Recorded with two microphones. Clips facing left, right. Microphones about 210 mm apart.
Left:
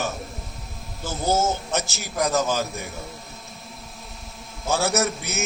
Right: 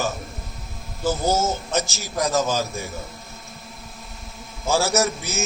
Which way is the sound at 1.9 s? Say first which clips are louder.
Left 1 dB; 60° left (ahead or behind).